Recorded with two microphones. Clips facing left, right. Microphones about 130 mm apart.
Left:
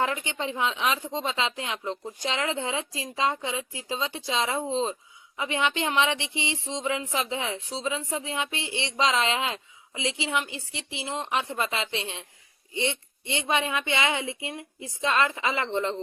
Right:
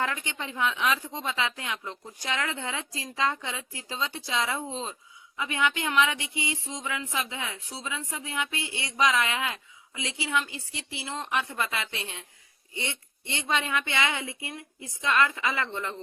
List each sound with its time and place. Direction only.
0.0 s speech: 20° left (ahead or behind)